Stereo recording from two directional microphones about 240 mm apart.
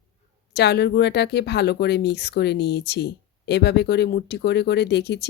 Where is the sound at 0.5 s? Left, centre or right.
Left.